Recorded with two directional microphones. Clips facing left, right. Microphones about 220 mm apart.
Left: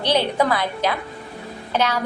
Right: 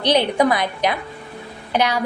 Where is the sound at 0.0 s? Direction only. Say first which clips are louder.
Right 3 dB; 15° right (ahead or behind).